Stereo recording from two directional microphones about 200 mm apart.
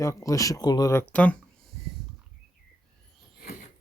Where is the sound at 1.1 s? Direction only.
5° left (ahead or behind).